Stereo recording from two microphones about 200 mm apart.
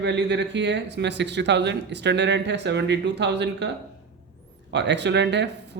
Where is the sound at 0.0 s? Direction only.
60° right (ahead or behind).